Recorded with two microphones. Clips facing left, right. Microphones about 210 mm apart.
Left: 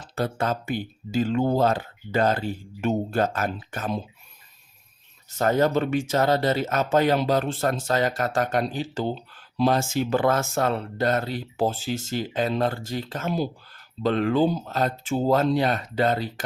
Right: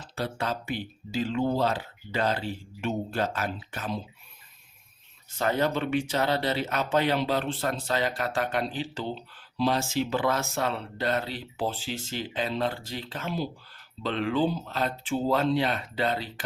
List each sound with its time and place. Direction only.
0.0 s speech: 45° left (ahead or behind)
5.4 s speech: 45° left (ahead or behind)